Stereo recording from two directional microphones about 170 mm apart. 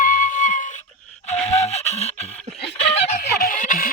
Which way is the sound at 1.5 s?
40° left (ahead or behind).